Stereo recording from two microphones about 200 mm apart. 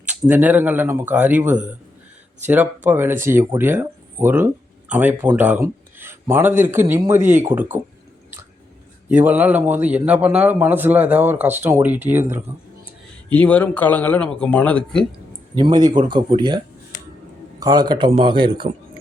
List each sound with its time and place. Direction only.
0.1 s a man's voice: 10° right (ahead or behind)
9.0 s a man's voice: 10° right (ahead or behind)
13.3 s speech: 5° left (ahead or behind)
15.5 s a man's voice: 20° right (ahead or behind)
17.6 s a man's voice: 20° right (ahead or behind)